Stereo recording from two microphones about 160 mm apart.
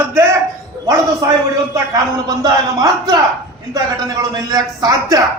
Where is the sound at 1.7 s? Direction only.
20° right (ahead or behind).